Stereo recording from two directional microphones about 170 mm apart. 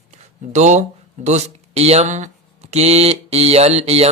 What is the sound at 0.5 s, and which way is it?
Speech, 45° right (ahead or behind).